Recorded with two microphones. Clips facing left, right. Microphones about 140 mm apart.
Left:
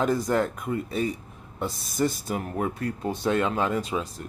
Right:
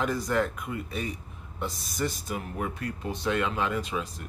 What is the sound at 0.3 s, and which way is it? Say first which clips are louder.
Speech: left 3 dB; 35° left (ahead or behind).